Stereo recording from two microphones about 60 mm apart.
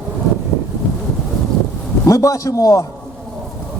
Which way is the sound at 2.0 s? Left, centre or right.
Left.